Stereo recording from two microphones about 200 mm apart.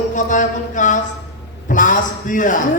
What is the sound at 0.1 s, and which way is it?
A man's voice, 40° left (ahead or behind).